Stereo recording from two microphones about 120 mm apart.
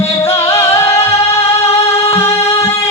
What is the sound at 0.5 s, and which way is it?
Music, 20° left (ahead or behind).